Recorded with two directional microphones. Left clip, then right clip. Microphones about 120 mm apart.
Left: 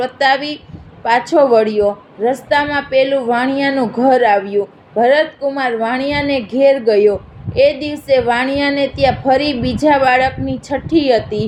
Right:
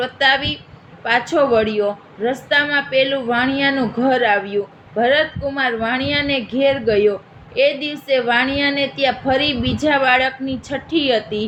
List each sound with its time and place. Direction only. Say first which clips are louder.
0.0 s a woman's voice: left 2 dB; 50° left (ahead or behind)